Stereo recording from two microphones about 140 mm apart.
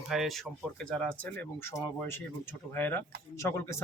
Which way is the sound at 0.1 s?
Centre (ahead or behind).